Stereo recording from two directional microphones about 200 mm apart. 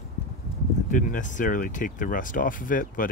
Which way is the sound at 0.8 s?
40° left (ahead or behind).